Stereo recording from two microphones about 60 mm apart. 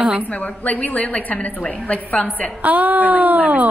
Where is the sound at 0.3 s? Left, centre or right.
Left.